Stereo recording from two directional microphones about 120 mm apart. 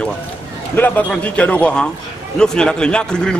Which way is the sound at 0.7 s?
15° left (ahead or behind).